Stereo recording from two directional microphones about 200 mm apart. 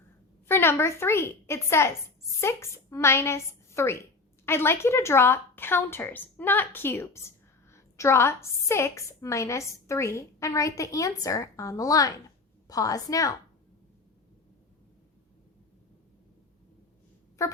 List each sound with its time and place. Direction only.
0.4 s a woman's voice: 10° left (ahead or behind)
17.4 s speech: 15° left (ahead or behind)